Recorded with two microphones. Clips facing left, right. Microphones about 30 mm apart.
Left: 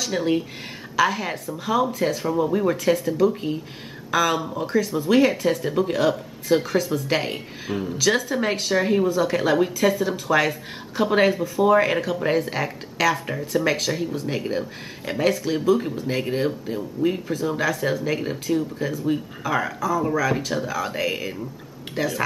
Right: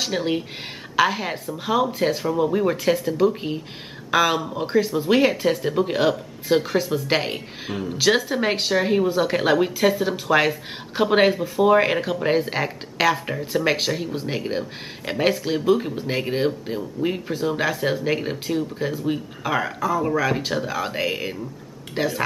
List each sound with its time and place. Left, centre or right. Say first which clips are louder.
0.1 s speech: left 1 dB; centre
13.0 s speech: right 1 dB; right
13.7 s speech: right 1 dB; centre
14.1 s speech: even; right
22.0 s speech: right 1 dB; right